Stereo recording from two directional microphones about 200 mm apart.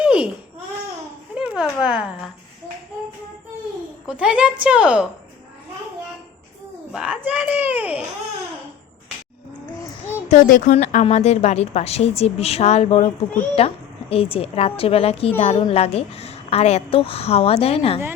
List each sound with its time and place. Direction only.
0.0 s babbling: 5° right (ahead or behind)
1.4 s a sound: 5° right (ahead or behind)
4.0 s a woman's voice: 5° right (ahead or behind)
6.9 s a child's voice: 5° right (ahead or behind)
10.2 s a woman's voice: 40° left (ahead or behind)